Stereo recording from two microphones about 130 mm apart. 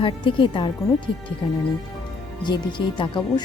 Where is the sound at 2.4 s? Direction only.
35° left (ahead or behind).